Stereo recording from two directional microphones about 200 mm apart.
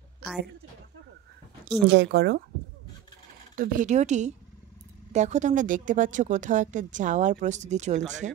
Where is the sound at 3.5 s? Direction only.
40° right (ahead or behind).